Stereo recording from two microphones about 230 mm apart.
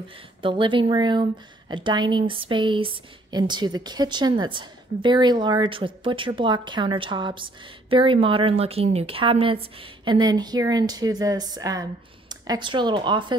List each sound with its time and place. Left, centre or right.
0.4 s a woman's voice: right